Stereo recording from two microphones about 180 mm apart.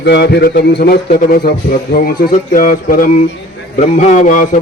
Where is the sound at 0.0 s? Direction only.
70° left (ahead or behind).